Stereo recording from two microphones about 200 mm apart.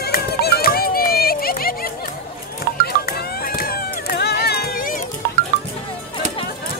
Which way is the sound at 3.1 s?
50° left (ahead or behind).